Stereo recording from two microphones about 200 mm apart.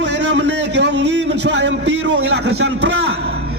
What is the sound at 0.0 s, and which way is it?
A man's voice, 60° right (ahead or behind).